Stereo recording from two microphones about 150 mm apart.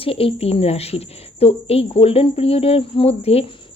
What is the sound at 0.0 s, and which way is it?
Speech, 40° left (ahead or behind).